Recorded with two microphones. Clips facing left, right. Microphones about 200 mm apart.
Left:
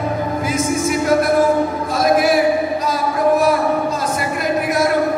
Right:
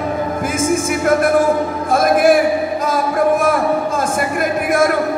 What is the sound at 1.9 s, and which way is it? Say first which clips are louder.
Music: right 4 dB; 50° right (ahead or behind).